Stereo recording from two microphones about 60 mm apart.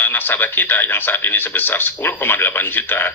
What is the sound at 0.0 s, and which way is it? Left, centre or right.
Speech, left.